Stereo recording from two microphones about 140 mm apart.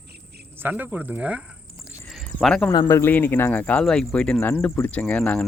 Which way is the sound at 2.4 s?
5° left (ahead or behind).